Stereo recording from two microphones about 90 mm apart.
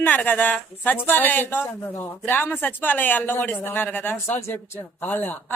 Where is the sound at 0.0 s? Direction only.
20° left (ahead or behind).